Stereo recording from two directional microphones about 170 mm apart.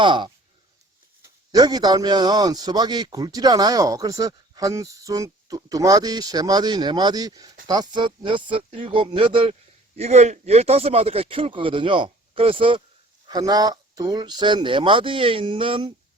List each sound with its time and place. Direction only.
0.0 s a man's voice: 30° right (ahead or behind)
1.5 s a man's voice: 25° right (ahead or behind)